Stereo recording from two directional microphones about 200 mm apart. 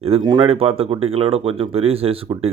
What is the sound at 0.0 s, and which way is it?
Speech, 25° right (ahead or behind).